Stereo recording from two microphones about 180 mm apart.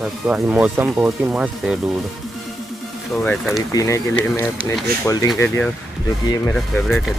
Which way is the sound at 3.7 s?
15° left (ahead or behind).